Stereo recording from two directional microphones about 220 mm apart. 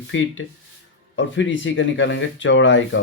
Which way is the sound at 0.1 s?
60° left (ahead or behind).